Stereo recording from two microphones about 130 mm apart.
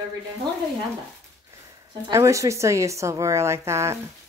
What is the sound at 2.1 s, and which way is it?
Speech, 25° right (ahead or behind).